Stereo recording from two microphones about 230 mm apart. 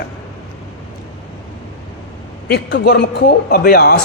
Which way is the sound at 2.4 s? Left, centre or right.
Left.